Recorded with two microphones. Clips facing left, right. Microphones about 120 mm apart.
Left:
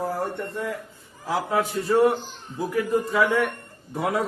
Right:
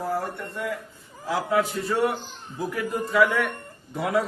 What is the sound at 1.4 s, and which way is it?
Speech, 30° left (ahead or behind).